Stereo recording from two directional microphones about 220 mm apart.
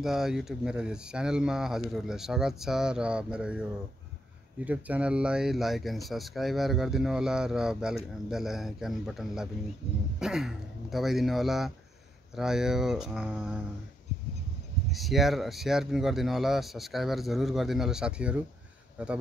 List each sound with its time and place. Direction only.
0.0 s speech: centre (ahead or behind)
4.6 s speech: 5° right (ahead or behind)
14.9 s speech: centre (ahead or behind)